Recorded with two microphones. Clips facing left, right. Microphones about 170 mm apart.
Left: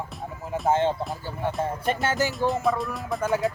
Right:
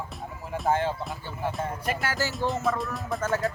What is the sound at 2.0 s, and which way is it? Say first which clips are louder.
Speech: left 5 dB; 20° left (ahead or behind).